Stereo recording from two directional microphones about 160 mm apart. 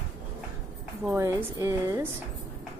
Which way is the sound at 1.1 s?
20° right (ahead or behind).